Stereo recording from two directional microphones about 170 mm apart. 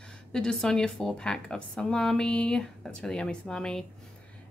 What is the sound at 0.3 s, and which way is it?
A woman's voice, 5° left (ahead or behind).